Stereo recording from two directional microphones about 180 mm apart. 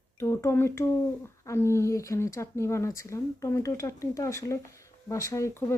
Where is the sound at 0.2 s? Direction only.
15° left (ahead or behind).